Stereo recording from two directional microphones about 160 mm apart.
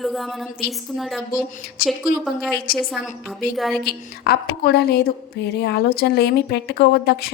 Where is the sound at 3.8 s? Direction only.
75° left (ahead or behind).